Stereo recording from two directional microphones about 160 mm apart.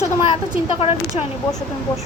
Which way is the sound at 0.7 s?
35° left (ahead or behind).